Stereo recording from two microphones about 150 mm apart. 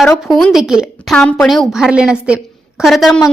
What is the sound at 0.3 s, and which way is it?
A woman's voice, centre (ahead or behind).